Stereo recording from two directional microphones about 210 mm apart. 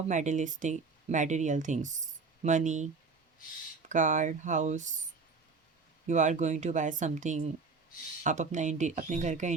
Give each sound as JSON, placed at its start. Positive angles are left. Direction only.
{"t": 0.1, "sound": "speech", "side_deg": -35}
{"t": 6.1, "sound": "speech", "side_deg": -35}